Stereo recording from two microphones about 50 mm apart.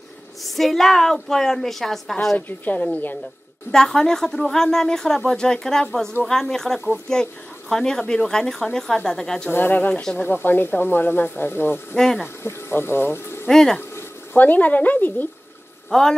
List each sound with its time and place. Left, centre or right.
0.4 s a woman's voice: centre
2.3 s a woman's voice: left
3.7 s a woman's voice: centre
9.5 s a woman's voice: left
13.5 s a woman's voice: centre
14.3 s a woman's voice: left
15.9 s a woman's voice: centre